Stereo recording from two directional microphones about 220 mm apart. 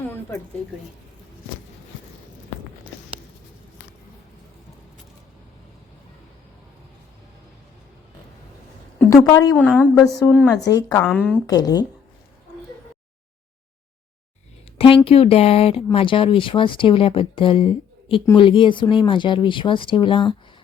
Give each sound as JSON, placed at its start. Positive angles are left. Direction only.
{"t": 0.1, "sound": "speech", "side_deg": 15}
{"t": 9.0, "sound": "a woman's voice", "side_deg": 15}
{"t": 11.0, "sound": "a woman's voice", "side_deg": 5}
{"t": 11.4, "sound": "a woman's voice", "side_deg": 15}
{"t": 14.8, "sound": "speech", "side_deg": 25}